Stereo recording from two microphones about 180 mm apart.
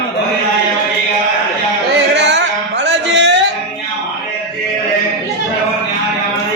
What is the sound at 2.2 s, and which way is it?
Music, 75° right (ahead or behind).